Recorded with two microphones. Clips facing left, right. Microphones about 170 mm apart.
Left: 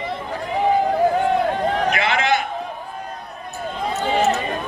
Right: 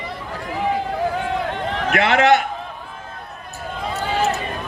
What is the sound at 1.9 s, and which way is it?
Speech, 70° right (ahead or behind).